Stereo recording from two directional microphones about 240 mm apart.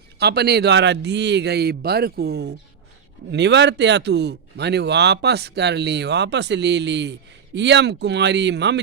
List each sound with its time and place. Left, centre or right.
0.2 s speech: right